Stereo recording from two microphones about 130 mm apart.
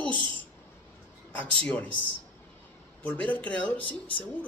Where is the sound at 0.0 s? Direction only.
40° right (ahead or behind).